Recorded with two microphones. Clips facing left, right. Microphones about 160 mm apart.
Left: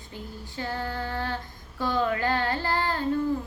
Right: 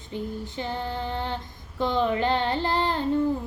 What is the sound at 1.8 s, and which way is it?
Child singing, 20° right (ahead or behind).